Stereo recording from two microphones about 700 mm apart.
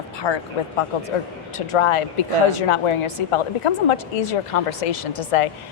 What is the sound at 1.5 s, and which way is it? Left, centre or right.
A woman's voice, left.